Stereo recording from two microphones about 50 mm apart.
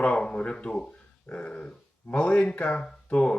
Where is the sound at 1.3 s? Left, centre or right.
Left.